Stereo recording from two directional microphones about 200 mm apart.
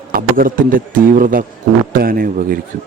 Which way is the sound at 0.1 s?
45° right (ahead or behind).